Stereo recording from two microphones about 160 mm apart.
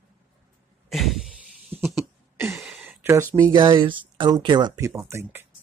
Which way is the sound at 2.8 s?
15° right (ahead or behind).